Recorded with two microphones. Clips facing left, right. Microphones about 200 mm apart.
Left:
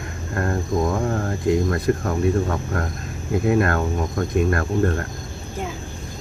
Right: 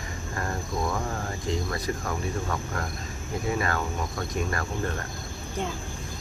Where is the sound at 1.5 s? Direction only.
60° left (ahead or behind).